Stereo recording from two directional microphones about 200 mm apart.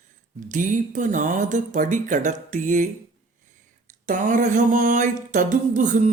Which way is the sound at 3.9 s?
40° right (ahead or behind).